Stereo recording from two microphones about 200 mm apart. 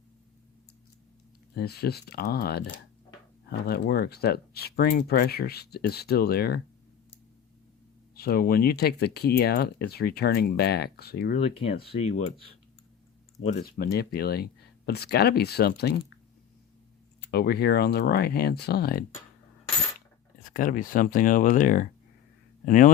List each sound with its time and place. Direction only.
1.5 s speech: 55° left (ahead or behind)
8.1 s speech: 50° left (ahead or behind)
11.5 s speech: 30° left (ahead or behind)
13.6 s speech: 50° left (ahead or behind)
17.3 s speech: 50° left (ahead or behind)
20.5 s speech: 45° left (ahead or behind)